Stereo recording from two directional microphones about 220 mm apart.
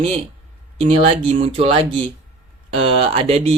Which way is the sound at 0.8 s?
25° right (ahead or behind).